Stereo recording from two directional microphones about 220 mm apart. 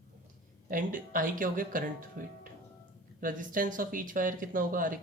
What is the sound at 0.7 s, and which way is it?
Speech, 35° right (ahead or behind).